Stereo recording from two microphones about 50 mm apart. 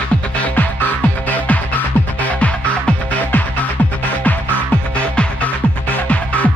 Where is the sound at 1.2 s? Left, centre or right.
Left.